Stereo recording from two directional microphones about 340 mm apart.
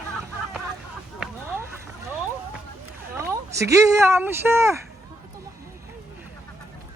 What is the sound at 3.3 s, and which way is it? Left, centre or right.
Speech, centre.